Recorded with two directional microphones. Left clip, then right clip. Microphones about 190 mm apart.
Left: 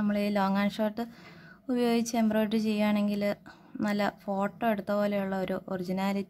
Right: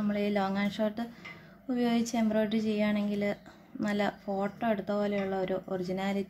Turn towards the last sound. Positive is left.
turn(degrees=25)  # may be behind; listen again after turning